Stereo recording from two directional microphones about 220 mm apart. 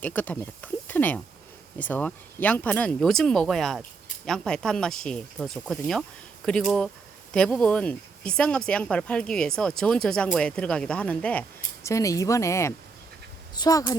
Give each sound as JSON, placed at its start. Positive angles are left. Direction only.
{"t": 0.0, "sound": "speech", "side_deg": 10}